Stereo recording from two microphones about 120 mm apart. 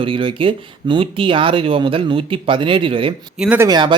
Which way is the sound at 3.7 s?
40° right (ahead or behind).